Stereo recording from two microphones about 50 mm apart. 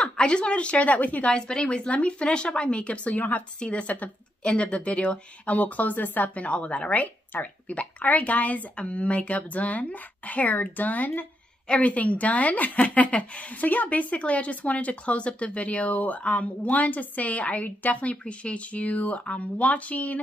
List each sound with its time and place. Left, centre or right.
0.0 s speech: left
4.4 s speech: centre